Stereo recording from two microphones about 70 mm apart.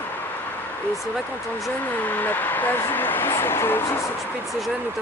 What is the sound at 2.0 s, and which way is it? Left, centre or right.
Speech, left.